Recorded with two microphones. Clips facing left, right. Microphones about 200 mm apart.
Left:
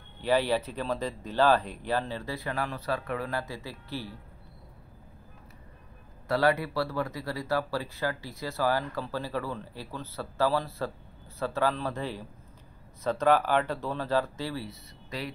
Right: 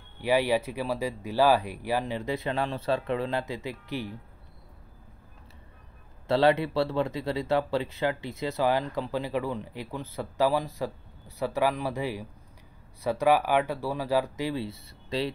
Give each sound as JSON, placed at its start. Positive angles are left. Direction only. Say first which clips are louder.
{"t": 0.2, "sound": "speech", "louder": "right 1 dB", "side_deg": -10}
{"t": 6.2, "sound": "speech", "louder": "right 3 dB", "side_deg": -25}